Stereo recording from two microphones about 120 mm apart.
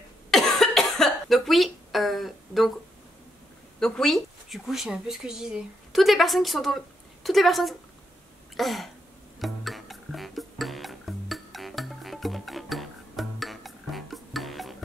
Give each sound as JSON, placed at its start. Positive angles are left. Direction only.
{"t": 0.3, "sound": "cough", "side_deg": 0}
{"t": 3.8, "sound": "a woman's voice", "side_deg": 5}
{"t": 9.4, "sound": "music", "side_deg": 0}